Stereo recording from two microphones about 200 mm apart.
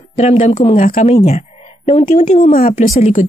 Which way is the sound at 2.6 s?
45° left (ahead or behind).